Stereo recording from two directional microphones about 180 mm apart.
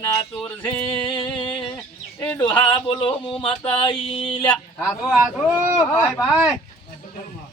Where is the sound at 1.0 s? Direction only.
25° left (ahead or behind).